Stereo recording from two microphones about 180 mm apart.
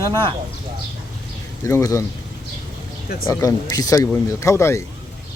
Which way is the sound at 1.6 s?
15° left (ahead or behind).